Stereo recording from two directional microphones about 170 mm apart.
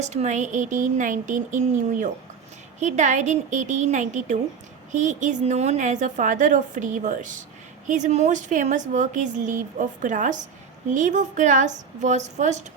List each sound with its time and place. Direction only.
0.0 s a woman's voice: 45° right (ahead or behind)